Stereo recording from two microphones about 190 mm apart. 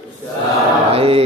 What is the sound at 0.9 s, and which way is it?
Speech, 30° right (ahead or behind).